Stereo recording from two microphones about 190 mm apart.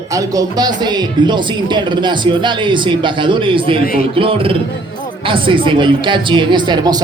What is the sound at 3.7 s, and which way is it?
Speech, 50° left (ahead or behind).